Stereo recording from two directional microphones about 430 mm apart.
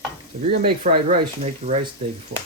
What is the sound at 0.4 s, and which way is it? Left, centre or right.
Speech, centre.